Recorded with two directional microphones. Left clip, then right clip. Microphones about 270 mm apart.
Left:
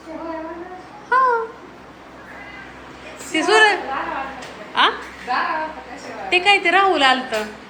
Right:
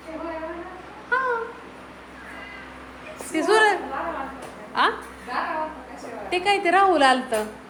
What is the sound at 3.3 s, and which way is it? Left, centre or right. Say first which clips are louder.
Speech: left 4 dB; centre.